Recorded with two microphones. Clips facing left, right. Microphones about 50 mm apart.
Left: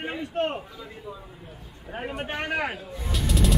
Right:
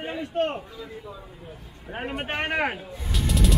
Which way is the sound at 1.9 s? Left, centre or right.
Right.